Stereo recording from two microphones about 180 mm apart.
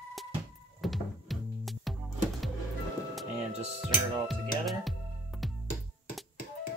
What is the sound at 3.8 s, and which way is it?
Music, centre (ahead or behind).